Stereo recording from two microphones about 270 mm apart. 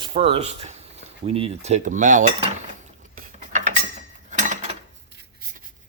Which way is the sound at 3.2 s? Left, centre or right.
Right.